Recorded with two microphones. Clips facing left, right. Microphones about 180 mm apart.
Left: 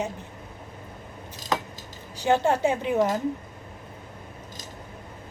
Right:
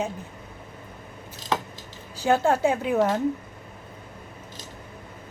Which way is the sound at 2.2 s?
20° left (ahead or behind).